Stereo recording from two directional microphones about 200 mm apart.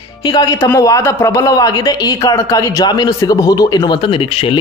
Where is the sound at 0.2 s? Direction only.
20° left (ahead or behind).